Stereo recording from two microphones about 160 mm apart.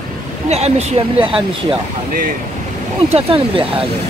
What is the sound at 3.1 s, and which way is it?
Speech, 35° right (ahead or behind).